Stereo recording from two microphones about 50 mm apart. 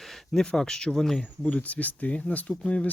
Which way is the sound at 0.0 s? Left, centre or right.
Centre.